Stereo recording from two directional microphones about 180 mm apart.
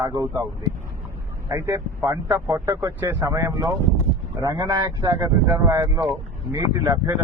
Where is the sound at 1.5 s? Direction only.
15° right (ahead or behind).